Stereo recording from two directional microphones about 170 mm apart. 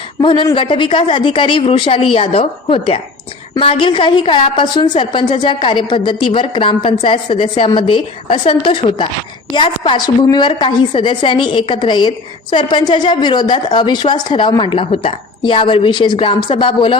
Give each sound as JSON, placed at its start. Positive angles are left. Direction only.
{"t": 0.2, "sound": "a woman's voice", "side_deg": 25}